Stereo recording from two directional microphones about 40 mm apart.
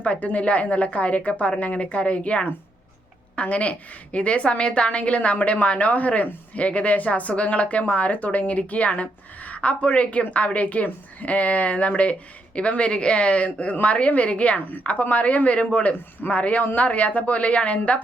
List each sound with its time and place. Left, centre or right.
0.0 s a woman's voice: left